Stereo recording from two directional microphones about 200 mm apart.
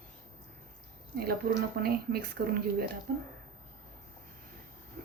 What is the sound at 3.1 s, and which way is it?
Speech, 50° right (ahead or behind).